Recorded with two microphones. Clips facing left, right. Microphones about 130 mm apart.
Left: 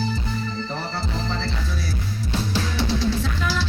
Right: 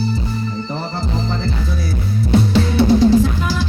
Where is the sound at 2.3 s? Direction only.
50° right (ahead or behind).